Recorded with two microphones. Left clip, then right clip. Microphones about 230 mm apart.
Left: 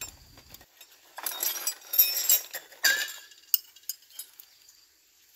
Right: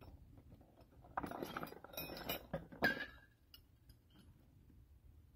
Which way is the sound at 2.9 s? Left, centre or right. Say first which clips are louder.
Left 16 dB; centre.